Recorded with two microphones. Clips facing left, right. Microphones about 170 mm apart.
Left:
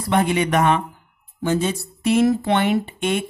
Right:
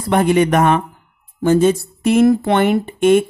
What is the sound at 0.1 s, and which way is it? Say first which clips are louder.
Speech: right 5 dB; 45° right (ahead or behind).